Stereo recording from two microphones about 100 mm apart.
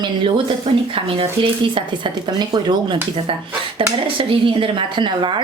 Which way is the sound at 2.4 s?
50° right (ahead or behind).